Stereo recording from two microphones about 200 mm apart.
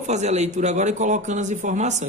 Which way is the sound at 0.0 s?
35° right (ahead or behind).